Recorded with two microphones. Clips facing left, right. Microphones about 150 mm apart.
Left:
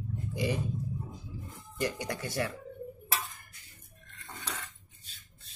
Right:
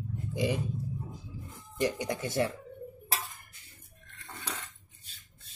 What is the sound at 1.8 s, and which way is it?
Speech, 20° right (ahead or behind).